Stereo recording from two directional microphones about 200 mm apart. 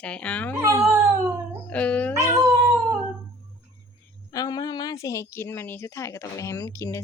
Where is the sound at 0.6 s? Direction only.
15° right (ahead or behind).